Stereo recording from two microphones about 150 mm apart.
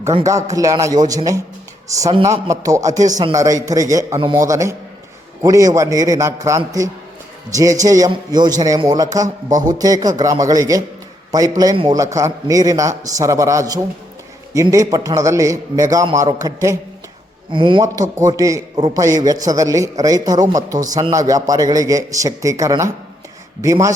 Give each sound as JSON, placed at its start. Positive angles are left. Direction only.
{"t": 0.3, "sound": "a man's voice", "side_deg": -20}
{"t": 9.2, "sound": "speech", "side_deg": -60}
{"t": 9.6, "sound": "a man's voice", "side_deg": -25}
{"t": 17.5, "sound": "speech", "side_deg": -35}
{"t": 18.2, "sound": "a man's voice", "side_deg": -20}